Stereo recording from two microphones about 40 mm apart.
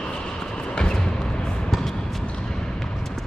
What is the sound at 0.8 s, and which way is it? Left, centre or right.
Music, centre.